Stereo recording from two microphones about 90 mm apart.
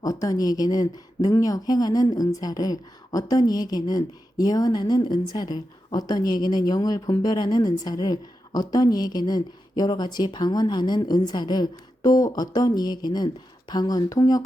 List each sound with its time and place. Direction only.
0.0 s speech: 40° left (ahead or behind)